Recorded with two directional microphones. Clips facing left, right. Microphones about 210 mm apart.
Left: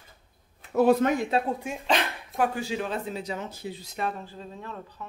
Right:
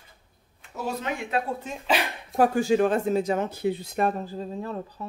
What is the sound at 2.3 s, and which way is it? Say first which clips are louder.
Speech: right 7 dB; 40° right (ahead or behind).